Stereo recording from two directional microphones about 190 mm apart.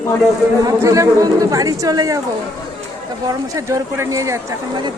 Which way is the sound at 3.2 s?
15° right (ahead or behind).